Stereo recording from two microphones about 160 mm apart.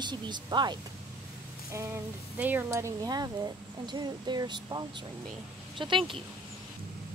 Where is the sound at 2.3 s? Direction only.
10° right (ahead or behind); by 6.1 s 30° right (ahead or behind).